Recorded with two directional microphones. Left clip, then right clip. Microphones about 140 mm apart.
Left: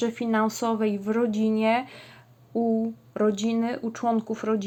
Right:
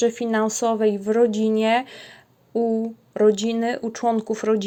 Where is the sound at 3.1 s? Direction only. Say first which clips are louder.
Right 7 dB; 30° right (ahead or behind).